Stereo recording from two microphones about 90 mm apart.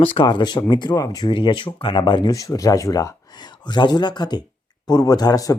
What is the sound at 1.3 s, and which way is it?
Speech, 65° left (ahead or behind).